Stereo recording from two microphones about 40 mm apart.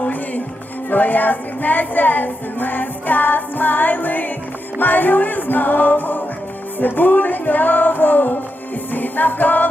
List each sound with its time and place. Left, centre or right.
0.0 s music: left